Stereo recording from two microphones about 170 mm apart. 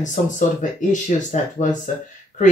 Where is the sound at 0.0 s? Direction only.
50° left (ahead or behind).